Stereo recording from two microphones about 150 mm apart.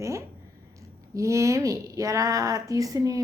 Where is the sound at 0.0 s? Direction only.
20° right (ahead or behind).